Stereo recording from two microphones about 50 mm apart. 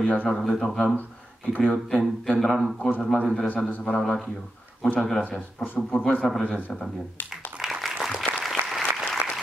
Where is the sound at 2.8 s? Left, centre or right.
Centre.